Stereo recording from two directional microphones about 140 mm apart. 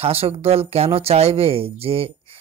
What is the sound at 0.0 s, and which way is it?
Speech, 45° right (ahead or behind).